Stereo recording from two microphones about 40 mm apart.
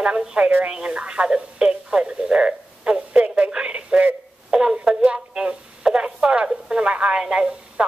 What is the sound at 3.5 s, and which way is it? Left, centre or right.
Radio, right.